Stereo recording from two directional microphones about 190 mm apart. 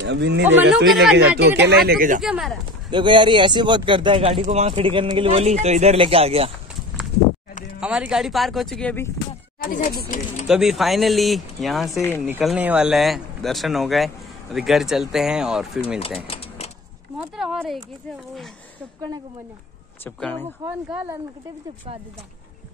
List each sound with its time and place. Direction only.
0.0 s speech: 65° right (ahead or behind)
0.8 s speech: centre (ahead or behind)
1.1 s speech: 65° right (ahead or behind)
1.9 s speech: 45° right (ahead or behind)
2.2 s speech: 5° right (ahead or behind)
2.9 s speech: 25° right (ahead or behind)
7.8 s speech: 5° right (ahead or behind)
9.6 s speech: 45° left (ahead or behind)
10.4 s speech: 5° right (ahead or behind)
16.3 s a sound: 30° left (ahead or behind)
17.2 s speech: centre (ahead or behind)
20.2 s speech: 5° left (ahead or behind)
20.9 s speech: 10° right (ahead or behind)